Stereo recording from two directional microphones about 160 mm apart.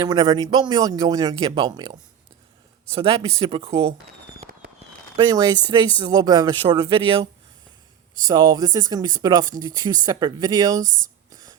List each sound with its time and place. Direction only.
0.0 s speech: 25° right (ahead or behind)
2.9 s speech: 35° right (ahead or behind)
5.1 s speech: 25° right (ahead or behind)